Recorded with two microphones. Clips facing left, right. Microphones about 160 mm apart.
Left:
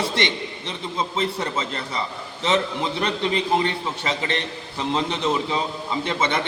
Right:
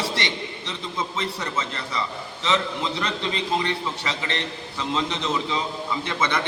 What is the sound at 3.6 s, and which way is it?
Speech, 25° left (ahead or behind).